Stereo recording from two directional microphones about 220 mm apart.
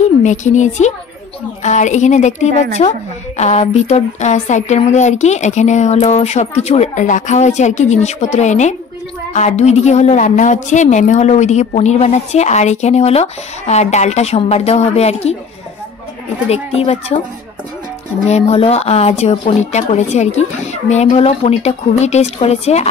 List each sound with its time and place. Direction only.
0.2 s a woman's voice: 35° left (ahead or behind)
16.4 s speech: 30° left (ahead or behind)
18.3 s speech: 30° left (ahead or behind)